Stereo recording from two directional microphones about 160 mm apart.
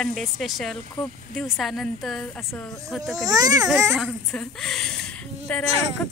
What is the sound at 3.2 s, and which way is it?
Speech, 25° right (ahead or behind).